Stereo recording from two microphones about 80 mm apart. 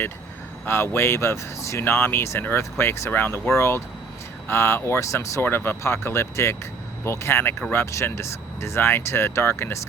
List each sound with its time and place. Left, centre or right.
0.6 s speech: left